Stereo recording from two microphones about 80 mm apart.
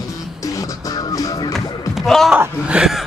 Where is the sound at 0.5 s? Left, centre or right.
Left.